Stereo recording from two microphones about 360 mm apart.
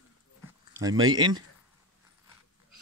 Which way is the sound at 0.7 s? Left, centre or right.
Centre.